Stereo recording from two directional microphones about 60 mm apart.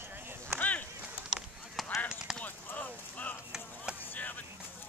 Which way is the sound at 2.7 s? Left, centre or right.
Left.